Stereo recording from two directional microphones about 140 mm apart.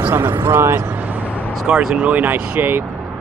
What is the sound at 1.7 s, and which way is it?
Speech, 5° right (ahead or behind).